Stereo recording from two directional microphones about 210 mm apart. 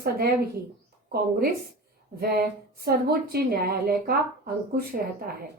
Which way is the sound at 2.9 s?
45° right (ahead or behind).